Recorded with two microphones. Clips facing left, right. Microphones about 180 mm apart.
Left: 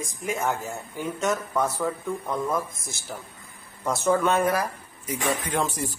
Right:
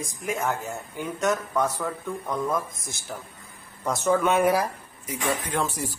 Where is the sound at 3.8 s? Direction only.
5° left (ahead or behind).